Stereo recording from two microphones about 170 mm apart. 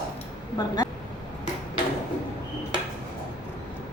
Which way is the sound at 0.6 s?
25° left (ahead or behind).